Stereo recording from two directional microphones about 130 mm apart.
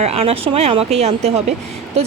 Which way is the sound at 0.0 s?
50° right (ahead or behind).